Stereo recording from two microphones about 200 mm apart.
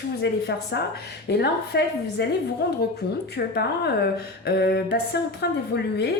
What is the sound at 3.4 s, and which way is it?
A woman's voice, 55° left (ahead or behind).